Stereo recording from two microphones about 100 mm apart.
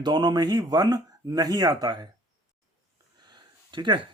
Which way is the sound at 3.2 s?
45° right (ahead or behind).